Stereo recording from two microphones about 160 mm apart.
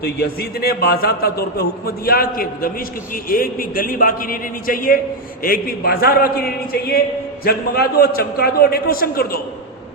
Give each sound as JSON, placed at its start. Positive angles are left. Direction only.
{"t": 0.0, "sound": "a man's voice", "side_deg": 75}